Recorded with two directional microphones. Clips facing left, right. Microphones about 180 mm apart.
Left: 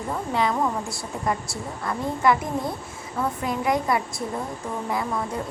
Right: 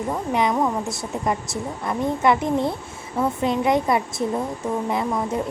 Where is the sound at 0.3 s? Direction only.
20° right (ahead or behind).